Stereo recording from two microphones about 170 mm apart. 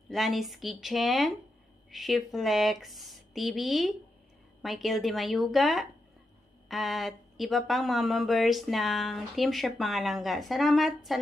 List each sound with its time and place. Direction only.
0.1 s speech: centre (ahead or behind)